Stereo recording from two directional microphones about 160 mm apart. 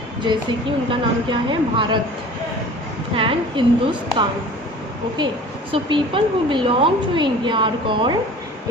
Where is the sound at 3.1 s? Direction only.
35° right (ahead or behind).